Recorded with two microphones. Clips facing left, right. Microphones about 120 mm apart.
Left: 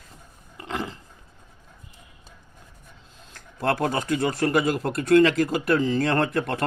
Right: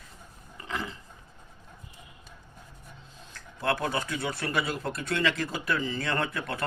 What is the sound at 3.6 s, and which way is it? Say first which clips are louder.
A man's voice: left 5 dB; 50° left (ahead or behind).